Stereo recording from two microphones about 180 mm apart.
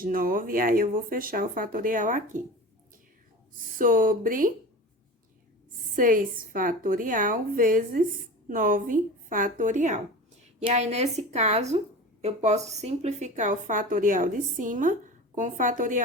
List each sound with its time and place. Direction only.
0.0 s speech: 50° right (ahead or behind)
3.8 s speech: 50° right (ahead or behind)
6.0 s speech: 50° right (ahead or behind)